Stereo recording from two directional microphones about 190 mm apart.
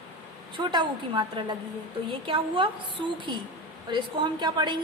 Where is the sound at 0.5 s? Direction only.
25° right (ahead or behind).